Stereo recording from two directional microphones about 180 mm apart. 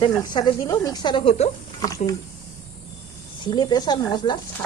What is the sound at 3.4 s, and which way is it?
Speech, 25° left (ahead or behind).